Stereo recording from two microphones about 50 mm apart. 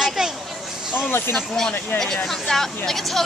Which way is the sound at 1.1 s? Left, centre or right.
Left.